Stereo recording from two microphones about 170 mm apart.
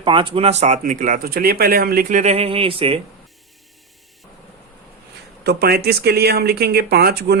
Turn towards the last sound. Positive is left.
turn(degrees=-70)  # may be behind; listen again after turning